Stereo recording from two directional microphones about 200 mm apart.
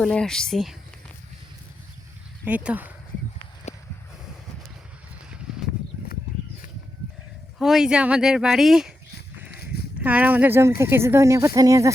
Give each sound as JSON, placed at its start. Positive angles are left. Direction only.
{"t": 0.0, "sound": "speech", "side_deg": 5}
{"t": 2.4, "sound": "speech", "side_deg": -10}
{"t": 3.7, "sound": "a sound", "side_deg": 35}
{"t": 5.5, "sound": "a sound", "side_deg": 0}
{"t": 7.6, "sound": "speech", "side_deg": 0}
{"t": 10.0, "sound": "speech", "side_deg": -10}